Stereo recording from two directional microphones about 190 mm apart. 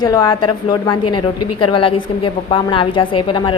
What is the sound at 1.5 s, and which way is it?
A woman's voice, 25° left (ahead or behind).